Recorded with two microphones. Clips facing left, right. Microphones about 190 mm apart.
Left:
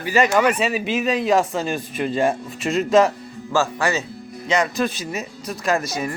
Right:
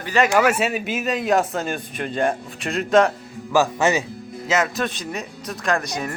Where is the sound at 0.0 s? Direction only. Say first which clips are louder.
Left 1 dB; 5° left (ahead or behind).